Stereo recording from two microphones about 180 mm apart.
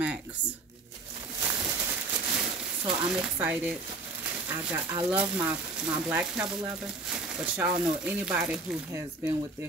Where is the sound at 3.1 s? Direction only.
5° right (ahead or behind).